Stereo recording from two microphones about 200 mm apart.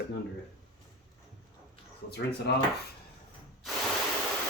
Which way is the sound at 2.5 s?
60° left (ahead or behind).